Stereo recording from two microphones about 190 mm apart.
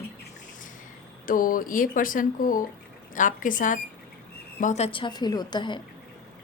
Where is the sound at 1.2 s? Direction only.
45° left (ahead or behind); by 5.8 s 25° left (ahead or behind).